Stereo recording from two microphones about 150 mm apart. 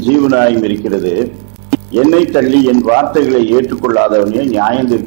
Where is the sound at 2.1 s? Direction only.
15° right (ahead or behind).